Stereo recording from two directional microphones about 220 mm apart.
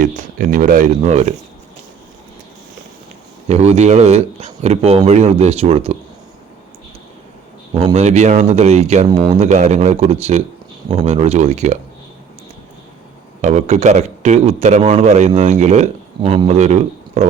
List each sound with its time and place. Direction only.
0.0 s a man's voice: 40° right (ahead or behind)
3.5 s a man's voice: 30° right (ahead or behind)
7.9 s a man's voice: 30° right (ahead or behind)
13.4 s a man's voice: 30° right (ahead or behind)